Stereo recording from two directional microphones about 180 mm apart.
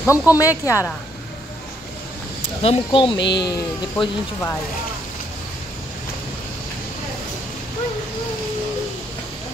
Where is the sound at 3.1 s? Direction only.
75° left (ahead or behind).